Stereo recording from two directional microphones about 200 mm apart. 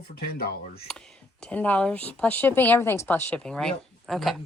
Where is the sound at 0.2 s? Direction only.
50° left (ahead or behind).